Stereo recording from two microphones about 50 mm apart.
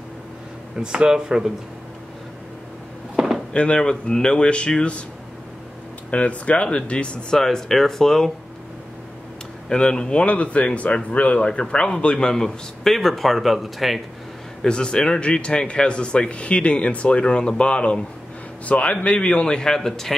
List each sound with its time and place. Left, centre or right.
0.9 s speech: centre
3.2 s door: centre
3.5 s a man's voice: left
6.0 s speech: left
7.3 s a man's voice: centre
9.7 s a man's voice: centre
14.6 s a man's voice: centre